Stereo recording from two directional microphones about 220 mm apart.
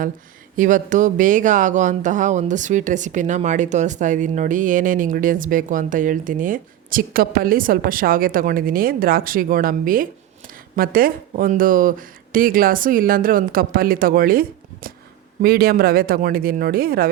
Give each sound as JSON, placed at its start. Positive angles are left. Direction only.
{"t": 0.5, "sound": "speech", "side_deg": -35}